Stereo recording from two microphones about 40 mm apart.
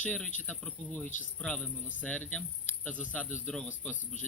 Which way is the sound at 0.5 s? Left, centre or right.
Centre.